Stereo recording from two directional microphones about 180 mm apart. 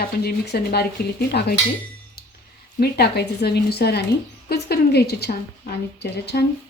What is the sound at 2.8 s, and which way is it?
A woman's voice, 65° left (ahead or behind).